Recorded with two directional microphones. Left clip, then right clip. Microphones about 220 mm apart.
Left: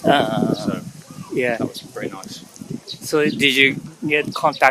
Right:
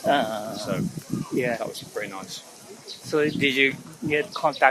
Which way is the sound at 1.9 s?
5° right (ahead or behind).